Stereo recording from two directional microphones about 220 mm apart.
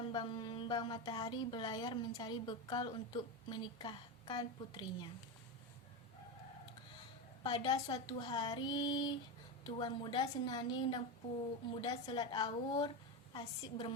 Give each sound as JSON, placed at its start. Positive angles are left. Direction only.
{"t": 0.1, "sound": "a woman's voice", "side_deg": 20}
{"t": 7.4, "sound": "a woman's voice", "side_deg": 20}